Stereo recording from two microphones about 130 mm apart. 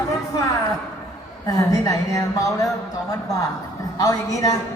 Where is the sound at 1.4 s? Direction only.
25° left (ahead or behind).